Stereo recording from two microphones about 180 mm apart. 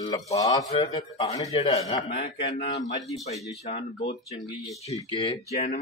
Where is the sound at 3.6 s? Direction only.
55° left (ahead or behind).